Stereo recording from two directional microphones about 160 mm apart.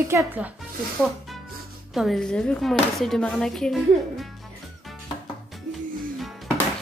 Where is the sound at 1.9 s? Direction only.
Centre (ahead or behind).